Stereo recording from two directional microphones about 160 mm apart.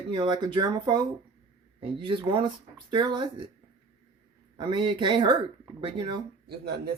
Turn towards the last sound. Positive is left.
turn(degrees=-80)